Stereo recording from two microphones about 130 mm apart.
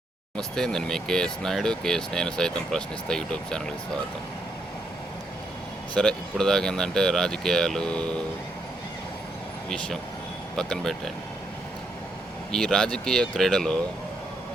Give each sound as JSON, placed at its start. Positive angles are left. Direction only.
{"t": 0.3, "sound": "speech", "side_deg": 5}
{"t": 5.9, "sound": "speech", "side_deg": 5}
{"t": 10.6, "sound": "speech", "side_deg": 5}
{"t": 12.5, "sound": "speech", "side_deg": 5}